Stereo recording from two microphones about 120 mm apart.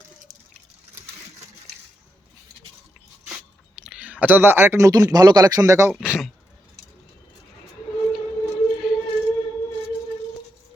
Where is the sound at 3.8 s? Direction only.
10° right (ahead or behind).